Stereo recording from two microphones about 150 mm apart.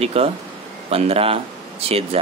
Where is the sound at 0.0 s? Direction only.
40° right (ahead or behind).